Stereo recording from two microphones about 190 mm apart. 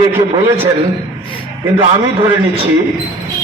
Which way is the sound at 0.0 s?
20° right (ahead or behind).